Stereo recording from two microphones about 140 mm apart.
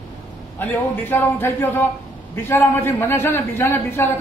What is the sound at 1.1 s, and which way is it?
A man's voice, 15° left (ahead or behind).